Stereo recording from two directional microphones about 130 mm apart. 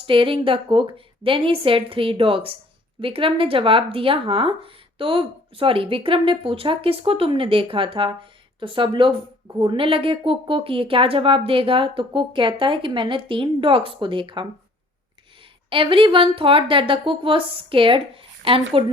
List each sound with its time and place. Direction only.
0.0 s speech: 40° right (ahead or behind)
15.7 s speech: 40° right (ahead or behind)